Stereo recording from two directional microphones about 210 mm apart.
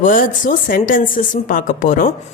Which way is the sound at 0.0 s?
40° left (ahead or behind).